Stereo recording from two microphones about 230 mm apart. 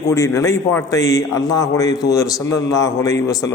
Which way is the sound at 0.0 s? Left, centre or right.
Centre.